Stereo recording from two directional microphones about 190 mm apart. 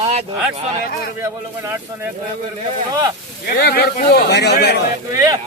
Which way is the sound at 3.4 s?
55° left (ahead or behind).